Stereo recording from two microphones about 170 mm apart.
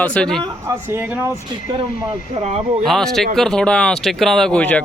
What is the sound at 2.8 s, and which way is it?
Speech, centre (ahead or behind).